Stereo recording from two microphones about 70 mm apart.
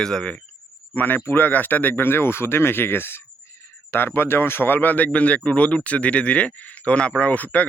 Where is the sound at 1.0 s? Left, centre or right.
Left.